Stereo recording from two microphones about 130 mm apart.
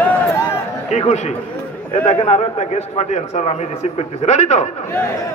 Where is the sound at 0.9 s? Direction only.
60° left (ahead or behind).